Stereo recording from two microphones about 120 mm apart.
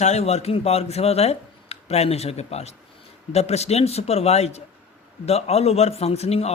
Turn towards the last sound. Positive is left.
turn(degrees=60)  # may be behind; listen again after turning